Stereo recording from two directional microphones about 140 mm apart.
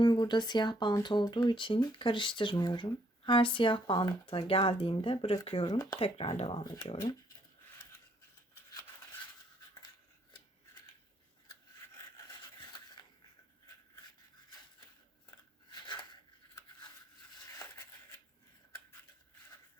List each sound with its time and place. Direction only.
0.0 s speech: 30° left (ahead or behind)
11.9 s filing: 25° left (ahead or behind)
15.7 s a sound: 35° left (ahead or behind)